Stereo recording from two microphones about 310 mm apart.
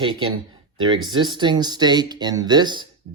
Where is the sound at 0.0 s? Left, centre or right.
Centre.